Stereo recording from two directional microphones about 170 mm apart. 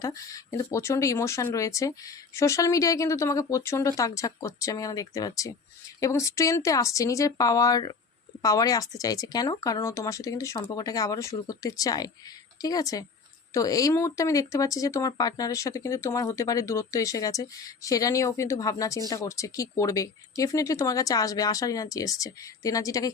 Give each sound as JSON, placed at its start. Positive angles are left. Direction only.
{"t": 0.0, "sound": "speech", "side_deg": 20}